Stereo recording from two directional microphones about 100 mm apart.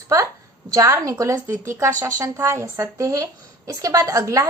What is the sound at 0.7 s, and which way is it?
A woman's voice, 35° right (ahead or behind).